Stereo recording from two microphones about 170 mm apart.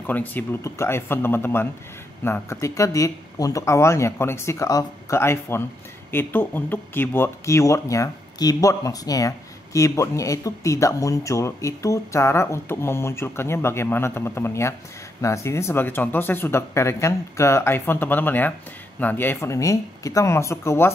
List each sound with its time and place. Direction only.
0.0 s speech: 10° left (ahead or behind)